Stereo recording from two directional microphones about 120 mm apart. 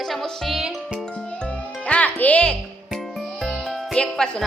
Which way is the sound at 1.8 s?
10° left (ahead or behind).